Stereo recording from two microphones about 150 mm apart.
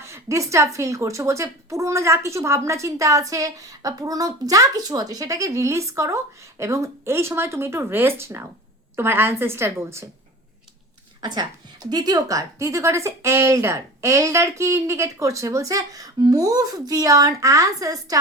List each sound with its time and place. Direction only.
0.0 s a woman's voice: 20° right (ahead or behind)
11.2 s a woman's voice: 25° right (ahead or behind)